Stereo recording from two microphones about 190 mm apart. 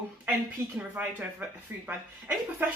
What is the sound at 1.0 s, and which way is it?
Speech, 10° right (ahead or behind).